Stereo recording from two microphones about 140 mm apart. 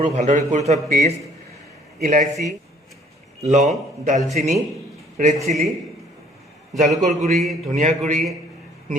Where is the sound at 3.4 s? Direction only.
55° right (ahead or behind).